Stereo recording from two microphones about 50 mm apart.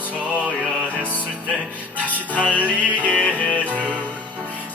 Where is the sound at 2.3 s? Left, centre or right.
Left.